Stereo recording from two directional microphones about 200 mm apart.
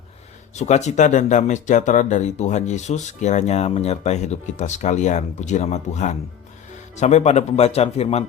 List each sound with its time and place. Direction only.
0.5 s speech: 35° left (ahead or behind)